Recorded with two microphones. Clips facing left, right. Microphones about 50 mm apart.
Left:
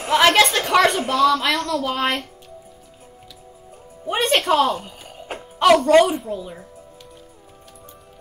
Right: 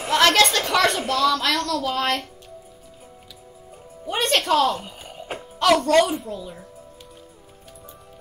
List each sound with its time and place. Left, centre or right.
0.2 s a woman's voice: centre
4.0 s a woman's voice: centre
4.7 s a sound: centre
5.6 s a woman's voice: centre